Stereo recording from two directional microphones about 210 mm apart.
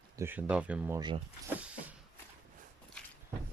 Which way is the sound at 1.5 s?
5° right (ahead or behind).